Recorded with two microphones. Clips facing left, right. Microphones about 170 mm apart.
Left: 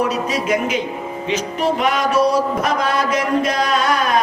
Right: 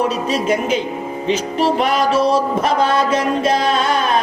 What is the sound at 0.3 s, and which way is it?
Music, 30° right (ahead or behind).